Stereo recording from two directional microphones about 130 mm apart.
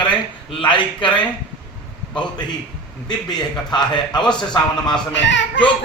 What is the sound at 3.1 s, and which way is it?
A man's voice, 35° left (ahead or behind).